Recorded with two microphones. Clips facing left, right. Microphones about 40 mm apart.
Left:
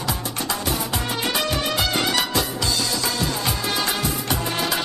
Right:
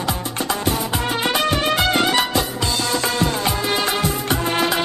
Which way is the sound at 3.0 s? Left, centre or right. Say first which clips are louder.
Right 4 dB; right.